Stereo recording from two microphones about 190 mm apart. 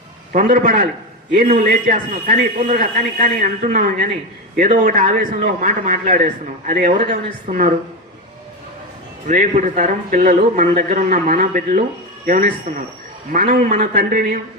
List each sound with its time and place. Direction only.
0.3 s speech: 45° right (ahead or behind)
9.2 s speech: 40° right (ahead or behind)